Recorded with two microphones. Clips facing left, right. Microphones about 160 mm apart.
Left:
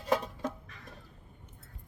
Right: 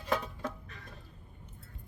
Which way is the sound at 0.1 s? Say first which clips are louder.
Left 3 dB; 20° left (ahead or behind).